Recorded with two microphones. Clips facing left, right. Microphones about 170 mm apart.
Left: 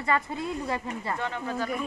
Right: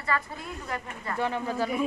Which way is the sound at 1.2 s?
5° right (ahead or behind).